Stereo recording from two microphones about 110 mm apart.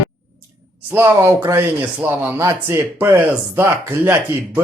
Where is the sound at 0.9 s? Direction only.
20° right (ahead or behind).